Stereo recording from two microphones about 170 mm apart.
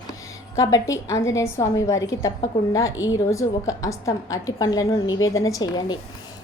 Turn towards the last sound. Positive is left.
turn(degrees=20)  # may be behind; listen again after turning